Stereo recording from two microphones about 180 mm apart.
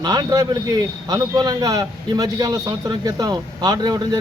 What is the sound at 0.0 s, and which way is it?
Speech, 20° right (ahead or behind).